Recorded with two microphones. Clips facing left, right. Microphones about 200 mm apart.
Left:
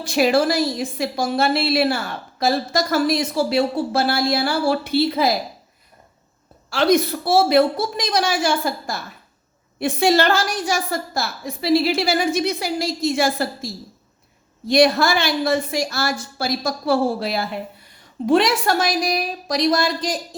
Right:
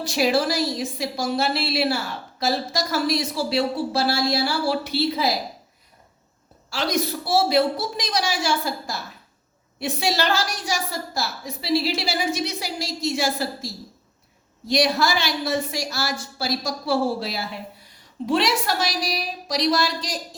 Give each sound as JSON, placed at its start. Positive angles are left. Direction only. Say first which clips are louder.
{"t": 0.0, "sound": "speech", "louder": "left 4 dB", "side_deg": 55}
{"t": 6.7, "sound": "a woman's voice", "louder": "left 7 dB", "side_deg": 55}
{"t": 14.7, "sound": "a woman's voice", "louder": "left 5 dB", "side_deg": 55}